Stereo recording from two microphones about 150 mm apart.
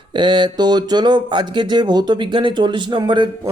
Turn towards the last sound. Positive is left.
turn(degrees=-30)  # may be behind; listen again after turning